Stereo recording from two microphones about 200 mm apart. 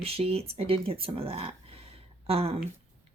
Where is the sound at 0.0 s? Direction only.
30° right (ahead or behind).